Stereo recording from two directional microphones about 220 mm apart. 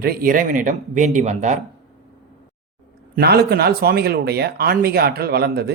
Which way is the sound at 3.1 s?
45° right (ahead or behind).